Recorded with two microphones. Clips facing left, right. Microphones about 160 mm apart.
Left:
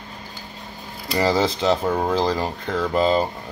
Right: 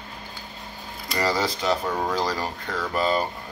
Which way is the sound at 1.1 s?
25° left (ahead or behind).